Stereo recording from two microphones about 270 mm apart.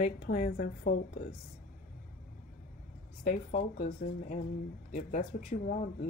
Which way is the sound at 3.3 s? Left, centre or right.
Left.